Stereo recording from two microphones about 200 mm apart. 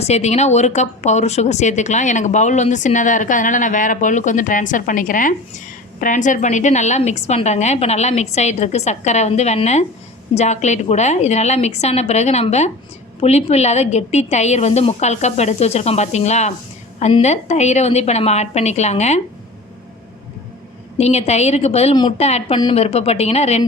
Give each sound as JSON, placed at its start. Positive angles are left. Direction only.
{"t": 0.0, "sound": "speech", "side_deg": 35}
{"t": 21.0, "sound": "speech", "side_deg": 30}